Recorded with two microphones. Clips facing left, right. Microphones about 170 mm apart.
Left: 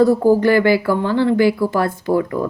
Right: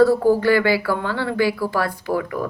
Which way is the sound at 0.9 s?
20° left (ahead or behind).